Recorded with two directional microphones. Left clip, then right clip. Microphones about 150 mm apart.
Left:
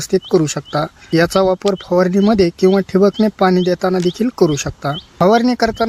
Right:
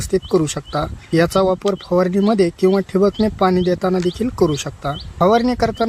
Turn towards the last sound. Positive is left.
turn(degrees=25)  # may be behind; listen again after turning